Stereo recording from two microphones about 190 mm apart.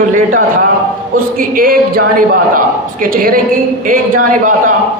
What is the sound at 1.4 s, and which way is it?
A man's voice, 50° right (ahead or behind).